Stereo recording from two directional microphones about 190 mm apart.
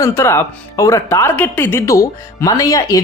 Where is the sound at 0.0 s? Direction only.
15° left (ahead or behind).